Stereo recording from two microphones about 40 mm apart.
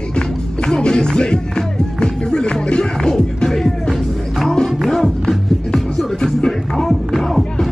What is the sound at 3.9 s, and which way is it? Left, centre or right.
Music, centre.